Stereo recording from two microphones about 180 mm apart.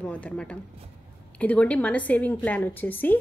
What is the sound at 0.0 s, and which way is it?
A woman's voice, 10° left (ahead or behind).